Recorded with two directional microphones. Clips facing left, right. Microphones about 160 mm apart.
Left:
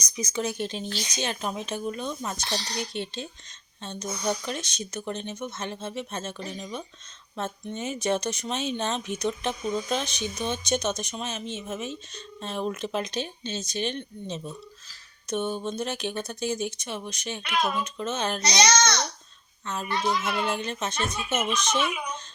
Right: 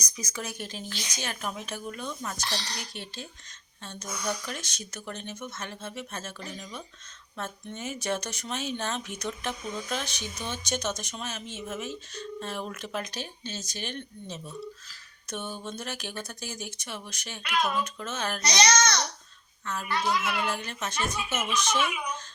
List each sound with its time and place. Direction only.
0.0 s speech: 25° left (ahead or behind)